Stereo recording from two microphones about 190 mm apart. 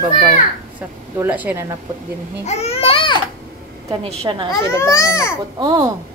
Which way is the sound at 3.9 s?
30° right (ahead or behind).